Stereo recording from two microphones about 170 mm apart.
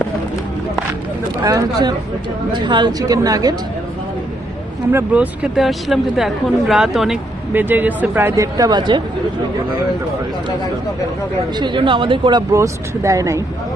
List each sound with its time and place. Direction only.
1.5 s speech: 25° right (ahead or behind)
4.9 s speech: 10° right (ahead or behind)
11.6 s speech: 30° right (ahead or behind)